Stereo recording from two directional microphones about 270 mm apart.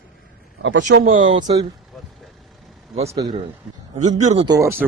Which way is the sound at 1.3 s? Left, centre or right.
Centre.